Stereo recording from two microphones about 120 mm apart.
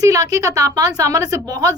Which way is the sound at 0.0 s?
30° right (ahead or behind).